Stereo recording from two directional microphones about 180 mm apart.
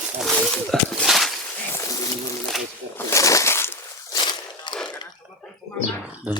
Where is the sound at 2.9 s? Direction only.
15° left (ahead or behind).